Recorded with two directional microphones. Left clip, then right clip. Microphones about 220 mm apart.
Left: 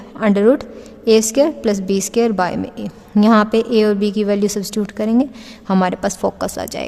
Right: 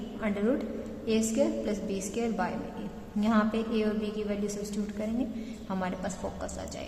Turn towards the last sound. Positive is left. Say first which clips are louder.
# left 15 dB
turn(degrees=45)  # may be behind; listen again after turning